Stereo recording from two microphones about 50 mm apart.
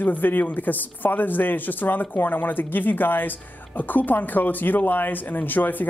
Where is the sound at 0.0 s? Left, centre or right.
Left.